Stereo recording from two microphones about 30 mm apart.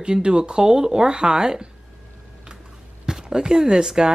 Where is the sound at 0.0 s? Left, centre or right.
Right.